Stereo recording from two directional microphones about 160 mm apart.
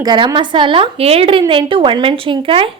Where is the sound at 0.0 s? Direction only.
25° right (ahead or behind).